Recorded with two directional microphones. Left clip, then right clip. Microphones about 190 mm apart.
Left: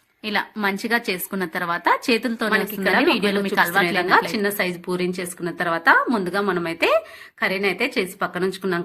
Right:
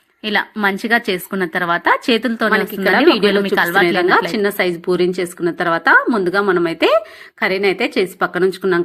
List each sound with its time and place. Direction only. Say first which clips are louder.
0.3 s a woman's voice: right 6 dB; 25° right (ahead or behind)